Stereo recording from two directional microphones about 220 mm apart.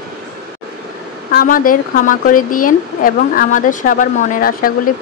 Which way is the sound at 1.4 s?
40° left (ahead or behind).